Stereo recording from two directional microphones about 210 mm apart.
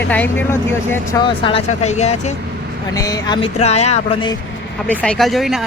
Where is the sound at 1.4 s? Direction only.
25° left (ahead or behind).